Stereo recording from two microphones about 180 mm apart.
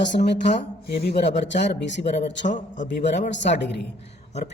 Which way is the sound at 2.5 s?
45° left (ahead or behind).